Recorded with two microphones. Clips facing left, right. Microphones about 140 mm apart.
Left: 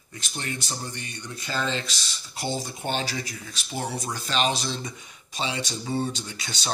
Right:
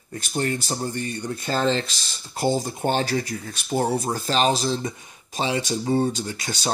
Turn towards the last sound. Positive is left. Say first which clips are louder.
# right 6 dB
turn(degrees=-40)  # may be behind; listen again after turning